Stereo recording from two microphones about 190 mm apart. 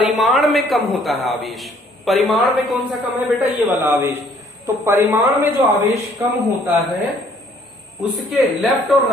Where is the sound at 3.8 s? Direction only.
10° right (ahead or behind).